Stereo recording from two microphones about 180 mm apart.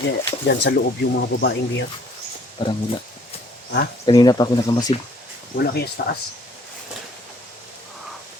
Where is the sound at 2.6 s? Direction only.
25° left (ahead or behind).